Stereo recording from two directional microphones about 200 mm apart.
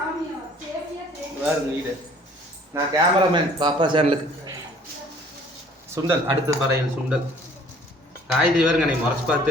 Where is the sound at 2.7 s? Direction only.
20° right (ahead or behind).